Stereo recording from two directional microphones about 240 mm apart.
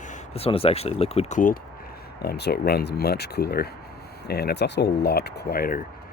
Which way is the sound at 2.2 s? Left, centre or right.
Left.